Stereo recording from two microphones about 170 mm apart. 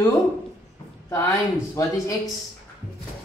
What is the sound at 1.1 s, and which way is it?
Speech, 15° left (ahead or behind).